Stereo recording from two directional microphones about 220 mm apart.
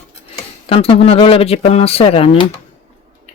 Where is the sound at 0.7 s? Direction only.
25° left (ahead or behind).